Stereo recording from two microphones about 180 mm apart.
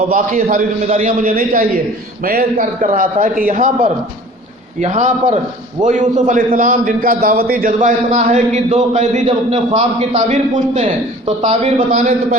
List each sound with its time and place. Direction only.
0.1 s a man's voice: 45° right (ahead or behind)
4.8 s a man's voice: 40° right (ahead or behind)